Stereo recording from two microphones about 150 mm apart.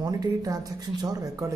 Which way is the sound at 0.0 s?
25° right (ahead or behind).